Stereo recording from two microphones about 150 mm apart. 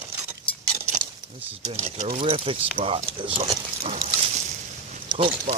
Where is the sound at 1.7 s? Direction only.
45° right (ahead or behind).